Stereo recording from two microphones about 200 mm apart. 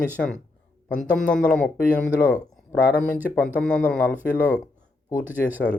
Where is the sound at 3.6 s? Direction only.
5° left (ahead or behind).